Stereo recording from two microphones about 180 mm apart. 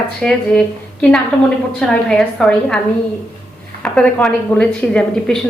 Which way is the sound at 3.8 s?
5° left (ahead or behind).